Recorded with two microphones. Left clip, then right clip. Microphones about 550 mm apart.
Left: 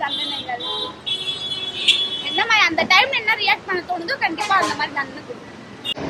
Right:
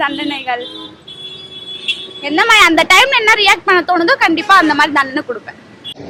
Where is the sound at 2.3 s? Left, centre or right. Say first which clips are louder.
Right 9 dB; right.